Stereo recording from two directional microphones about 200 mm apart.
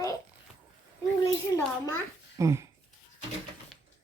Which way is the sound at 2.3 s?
15° right (ahead or behind).